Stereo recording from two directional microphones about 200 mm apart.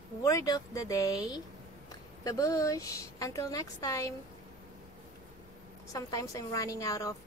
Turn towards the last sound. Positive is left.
turn(degrees=15)  # may be behind; listen again after turning